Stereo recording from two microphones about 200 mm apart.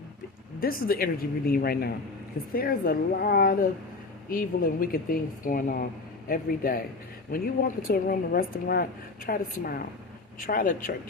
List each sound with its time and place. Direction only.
0.6 s a woman's voice: 45° left (ahead or behind)